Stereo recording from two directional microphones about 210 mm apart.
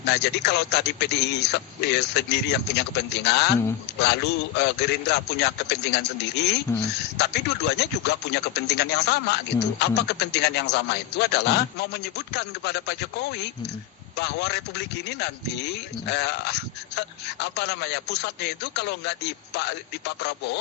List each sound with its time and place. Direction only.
0.1 s speech: 50° left (ahead or behind)